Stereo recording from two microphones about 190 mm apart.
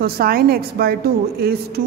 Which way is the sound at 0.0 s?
50° right (ahead or behind).